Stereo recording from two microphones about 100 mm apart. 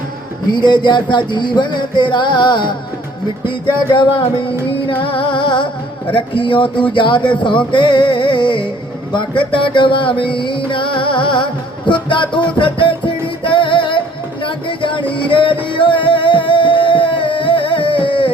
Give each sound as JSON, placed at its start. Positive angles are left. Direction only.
{"t": 0.5, "sound": "music", "side_deg": 50}